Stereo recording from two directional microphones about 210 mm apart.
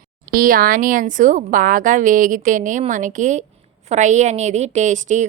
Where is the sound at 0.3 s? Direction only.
40° right (ahead or behind).